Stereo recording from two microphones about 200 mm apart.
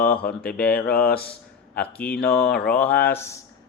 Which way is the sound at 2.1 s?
50° left (ahead or behind).